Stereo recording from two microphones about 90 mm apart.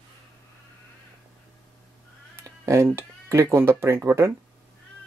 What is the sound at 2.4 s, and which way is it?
Cat, 35° right (ahead or behind).